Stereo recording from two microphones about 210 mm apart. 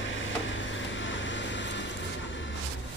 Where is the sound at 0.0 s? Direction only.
65° left (ahead or behind).